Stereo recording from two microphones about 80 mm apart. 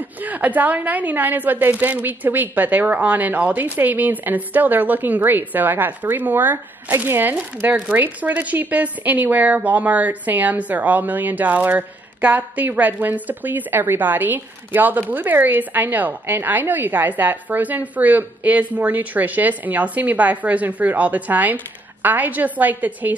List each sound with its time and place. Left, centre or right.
0.2 s a woman's voice: right